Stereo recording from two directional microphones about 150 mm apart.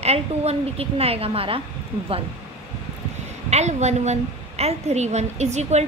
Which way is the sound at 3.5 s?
50° right (ahead or behind).